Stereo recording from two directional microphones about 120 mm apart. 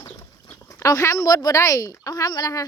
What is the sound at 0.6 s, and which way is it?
A woman's voice, 25° left (ahead or behind).